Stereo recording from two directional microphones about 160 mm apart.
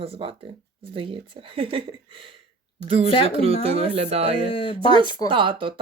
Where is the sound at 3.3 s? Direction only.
35° right (ahead or behind).